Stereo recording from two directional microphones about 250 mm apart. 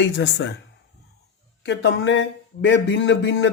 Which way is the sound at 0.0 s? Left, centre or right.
Left.